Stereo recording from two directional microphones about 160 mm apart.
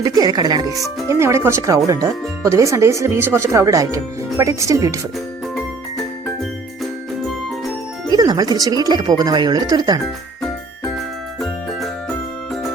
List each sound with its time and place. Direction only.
0.0 s speech: 25° right (ahead or behind)
8.1 s speech: 25° right (ahead or behind)
11.3 s music: centre (ahead or behind)